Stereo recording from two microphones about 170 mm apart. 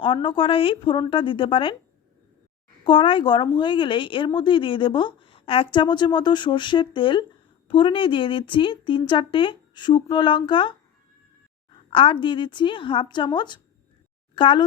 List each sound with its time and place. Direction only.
0.0 s a woman's voice: 30° left (ahead or behind)
2.8 s a woman's voice: 30° left (ahead or behind)
11.9 s a woman's voice: 30° left (ahead or behind)